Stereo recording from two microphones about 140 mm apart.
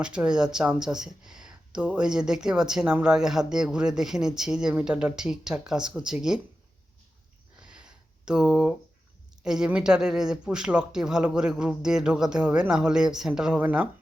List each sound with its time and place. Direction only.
0.0 s speech: 5° right (ahead or behind)
7.6 s a sound: 5° right (ahead or behind)
9.4 s speech: 5° right (ahead or behind)